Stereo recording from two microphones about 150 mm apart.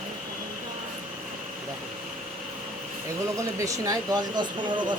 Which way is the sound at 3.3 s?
20° right (ahead or behind).